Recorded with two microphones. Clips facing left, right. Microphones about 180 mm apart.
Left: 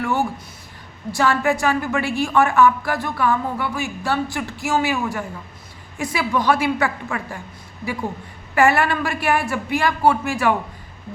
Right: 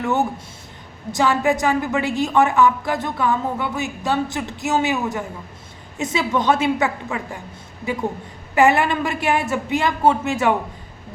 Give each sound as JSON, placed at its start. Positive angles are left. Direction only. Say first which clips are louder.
{"t": 0.0, "sound": "a woman's voice", "louder": "right 1 dB", "side_deg": -20}
{"t": 8.5, "sound": "a woman's voice", "louder": "right 1 dB", "side_deg": -20}